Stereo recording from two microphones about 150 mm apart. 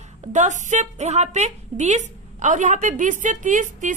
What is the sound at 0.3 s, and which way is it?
A woman's voice, 55° right (ahead or behind).